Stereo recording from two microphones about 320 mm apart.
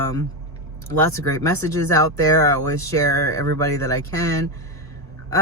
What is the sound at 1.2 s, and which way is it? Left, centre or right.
Speech, centre.